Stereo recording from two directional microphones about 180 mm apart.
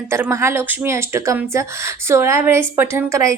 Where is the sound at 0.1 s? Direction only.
15° right (ahead or behind).